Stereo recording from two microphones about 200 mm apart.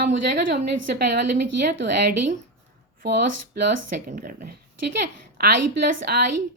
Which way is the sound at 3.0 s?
55° right (ahead or behind).